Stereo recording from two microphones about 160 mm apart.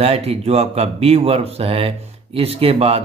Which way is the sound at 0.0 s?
40° right (ahead or behind).